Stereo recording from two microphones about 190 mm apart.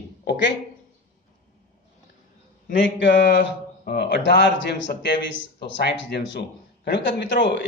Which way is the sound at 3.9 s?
55° left (ahead or behind).